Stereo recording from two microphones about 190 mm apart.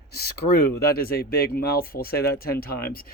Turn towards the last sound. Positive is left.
turn(degrees=50)  # may be behind; listen again after turning